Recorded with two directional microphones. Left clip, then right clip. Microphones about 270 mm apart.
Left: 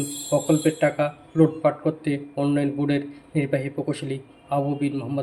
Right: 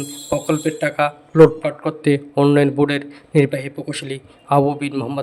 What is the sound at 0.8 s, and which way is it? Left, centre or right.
A man's voice, right.